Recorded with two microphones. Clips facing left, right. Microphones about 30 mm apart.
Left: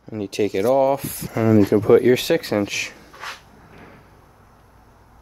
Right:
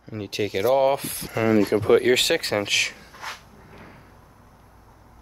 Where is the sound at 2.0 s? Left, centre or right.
Right.